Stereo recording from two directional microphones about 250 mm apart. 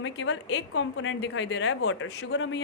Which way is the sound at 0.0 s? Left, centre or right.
Left.